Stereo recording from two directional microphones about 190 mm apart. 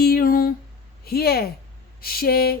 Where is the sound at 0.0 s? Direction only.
50° left (ahead or behind).